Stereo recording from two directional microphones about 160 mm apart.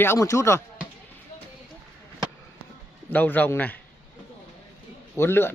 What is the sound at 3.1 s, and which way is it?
Speech, 10° left (ahead or behind).